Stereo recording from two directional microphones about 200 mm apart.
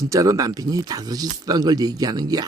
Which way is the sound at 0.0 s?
15° right (ahead or behind).